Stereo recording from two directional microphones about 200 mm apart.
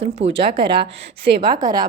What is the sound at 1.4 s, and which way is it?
Speech, 20° right (ahead or behind).